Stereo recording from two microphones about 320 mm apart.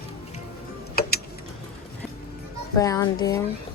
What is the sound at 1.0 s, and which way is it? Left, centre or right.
Tick-tock, left.